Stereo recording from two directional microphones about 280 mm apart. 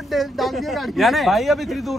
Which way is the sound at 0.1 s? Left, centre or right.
Centre.